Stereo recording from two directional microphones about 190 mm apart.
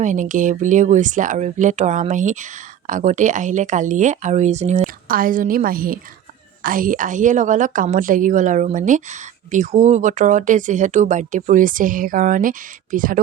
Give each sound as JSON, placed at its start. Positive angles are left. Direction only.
{"t": 0.0, "sound": "a woman's voice", "side_deg": -40}